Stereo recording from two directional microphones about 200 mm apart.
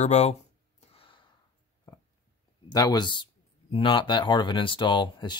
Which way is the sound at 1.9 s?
15° left (ahead or behind).